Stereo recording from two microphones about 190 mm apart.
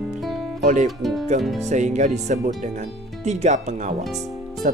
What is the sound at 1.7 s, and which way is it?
Speech, 40° right (ahead or behind).